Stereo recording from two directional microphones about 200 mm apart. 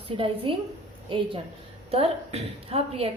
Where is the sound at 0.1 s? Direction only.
30° right (ahead or behind).